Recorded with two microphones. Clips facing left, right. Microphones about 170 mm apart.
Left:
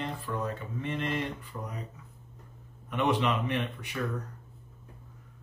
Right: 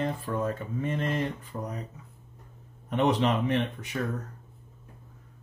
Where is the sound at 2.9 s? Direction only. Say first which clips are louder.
Right 3 dB; 40° right (ahead or behind).